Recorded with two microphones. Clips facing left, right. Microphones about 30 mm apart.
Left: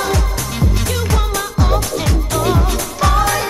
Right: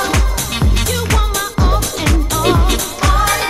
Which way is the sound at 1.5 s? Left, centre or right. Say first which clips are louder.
Even; centre.